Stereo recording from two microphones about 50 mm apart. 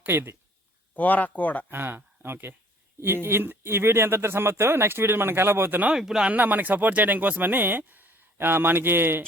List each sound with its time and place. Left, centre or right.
0.0 s speech: right
0.9 s speech: left
1.7 s speech: right
5.9 s speech: centre
6.2 s speech: right